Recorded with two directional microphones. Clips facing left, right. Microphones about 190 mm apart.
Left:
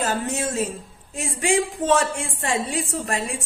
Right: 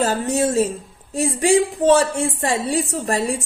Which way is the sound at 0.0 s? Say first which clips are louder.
Right 6 dB; 35° right (ahead or behind).